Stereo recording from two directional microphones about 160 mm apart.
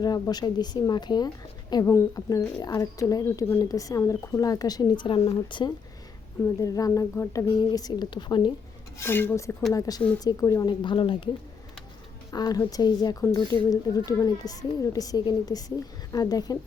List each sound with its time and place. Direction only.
0.0 s speech: 25° left (ahead or behind)
9.0 s speech: 15° left (ahead or behind); by 11.3 s 30° left (ahead or behind)
12.3 s speech: 25° left (ahead or behind)